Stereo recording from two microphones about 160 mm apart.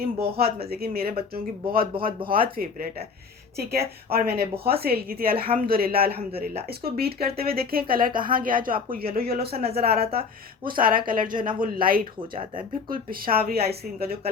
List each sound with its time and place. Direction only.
0.0 s speech: 70° right (ahead or behind)
2.0 s speech: 35° right (ahead or behind)
2.3 s speech: 65° right (ahead or behind)
9.1 s speech: 70° right (ahead or behind)
10.6 s speech: 65° right (ahead or behind)
12.3 s speech: 30° right (ahead or behind)
12.9 s speech: 65° right (ahead or behind)